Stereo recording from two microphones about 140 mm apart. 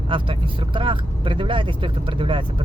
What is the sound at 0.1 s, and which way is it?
Speech, 35° right (ahead or behind).